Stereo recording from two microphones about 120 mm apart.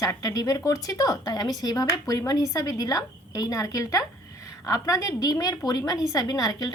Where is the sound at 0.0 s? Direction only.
25° left (ahead or behind).